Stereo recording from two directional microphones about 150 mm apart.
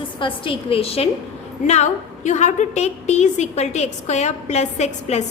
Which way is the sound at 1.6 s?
50° left (ahead or behind).